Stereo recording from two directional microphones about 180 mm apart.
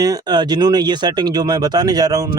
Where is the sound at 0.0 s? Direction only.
20° right (ahead or behind).